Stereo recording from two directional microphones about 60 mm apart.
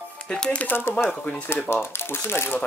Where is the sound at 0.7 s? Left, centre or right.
Left.